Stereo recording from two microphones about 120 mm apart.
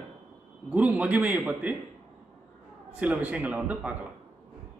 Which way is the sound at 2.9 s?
10° right (ahead or behind).